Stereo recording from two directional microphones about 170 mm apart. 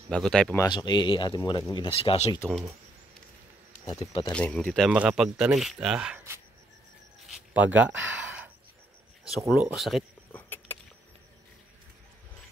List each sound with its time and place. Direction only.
0.1 s speech: 5° left (ahead or behind)
0.6 s speech: 25° left (ahead or behind)
2.0 s speech: 35° left (ahead or behind)
4.0 s speech: 30° left (ahead or behind)
4.3 s speech: 5° left (ahead or behind); by 6.4 s 15° right (ahead or behind)
7.2 s a sound: 10° right (ahead or behind)
9.5 s speech: 5° right (ahead or behind)